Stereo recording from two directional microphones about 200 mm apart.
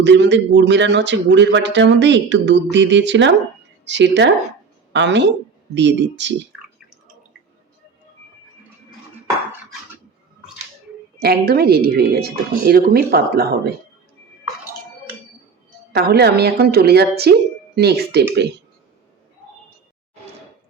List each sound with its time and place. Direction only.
0.0 s a woman's voice: 60° right (ahead or behind)
11.2 s speech: 50° right (ahead or behind)
15.9 s speech: 55° right (ahead or behind)